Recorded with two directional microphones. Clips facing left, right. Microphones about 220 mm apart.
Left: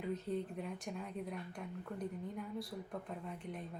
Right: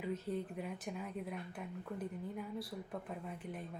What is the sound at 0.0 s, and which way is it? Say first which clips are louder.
A woman's voice: even; centre (ahead or behind).